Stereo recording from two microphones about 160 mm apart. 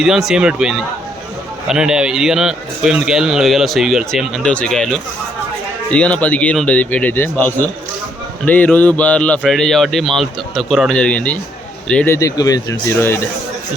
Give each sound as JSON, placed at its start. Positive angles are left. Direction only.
{"t": 0.0, "sound": "a man's voice", "side_deg": 0}